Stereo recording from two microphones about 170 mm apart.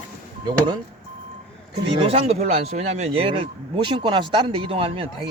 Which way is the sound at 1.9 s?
35° right (ahead or behind).